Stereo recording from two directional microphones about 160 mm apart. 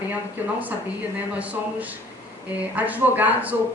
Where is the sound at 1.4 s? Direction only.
10° right (ahead or behind).